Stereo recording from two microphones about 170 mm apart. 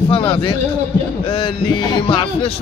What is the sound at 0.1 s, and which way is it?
A man's voice, 30° left (ahead or behind).